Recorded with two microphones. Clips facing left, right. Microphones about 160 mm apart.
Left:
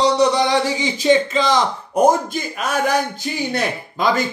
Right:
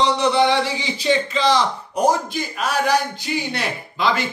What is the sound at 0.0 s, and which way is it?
Speech, 40° left (ahead or behind).